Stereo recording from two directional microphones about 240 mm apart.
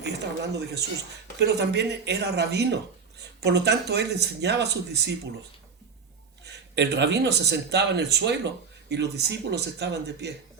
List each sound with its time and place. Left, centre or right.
0.5 s speech: right
6.4 s speech: right